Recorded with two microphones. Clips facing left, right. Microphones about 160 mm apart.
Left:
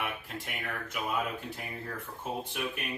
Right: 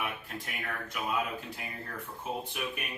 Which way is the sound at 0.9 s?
Centre (ahead or behind).